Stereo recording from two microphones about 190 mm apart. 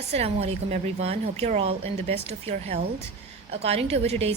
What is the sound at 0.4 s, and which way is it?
A woman's voice, 35° right (ahead or behind).